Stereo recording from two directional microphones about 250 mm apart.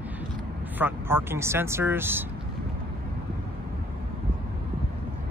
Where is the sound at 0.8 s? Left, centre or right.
Centre.